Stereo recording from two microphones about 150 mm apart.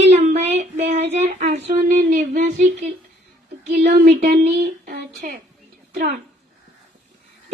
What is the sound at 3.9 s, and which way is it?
Speech, 90° right.